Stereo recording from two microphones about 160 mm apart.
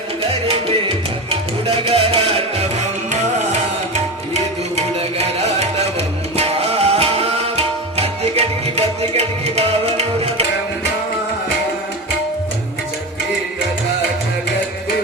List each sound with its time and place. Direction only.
0.2 s music: 35° right (ahead or behind)
4.4 s tabla: 45° right (ahead or behind)